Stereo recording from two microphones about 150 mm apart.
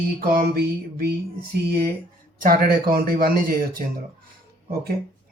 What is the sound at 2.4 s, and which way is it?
Speech, 70° right (ahead or behind).